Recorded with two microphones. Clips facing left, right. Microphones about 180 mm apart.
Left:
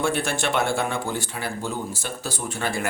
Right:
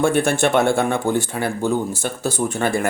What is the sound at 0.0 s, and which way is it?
Speech, 50° right (ahead or behind).